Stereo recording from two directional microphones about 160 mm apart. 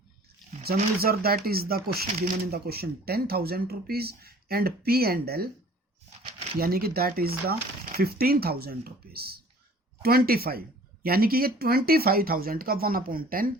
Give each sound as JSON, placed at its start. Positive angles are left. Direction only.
{"t": 0.6, "sound": "speech", "side_deg": -70}
{"t": 6.6, "sound": "speech", "side_deg": -70}